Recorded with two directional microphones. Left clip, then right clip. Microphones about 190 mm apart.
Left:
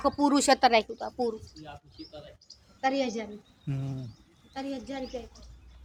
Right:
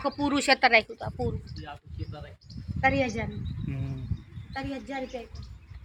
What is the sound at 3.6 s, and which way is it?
Bird, 15° left (ahead or behind).